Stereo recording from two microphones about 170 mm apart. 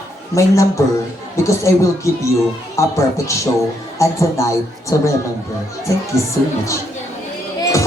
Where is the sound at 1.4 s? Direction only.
20° left (ahead or behind).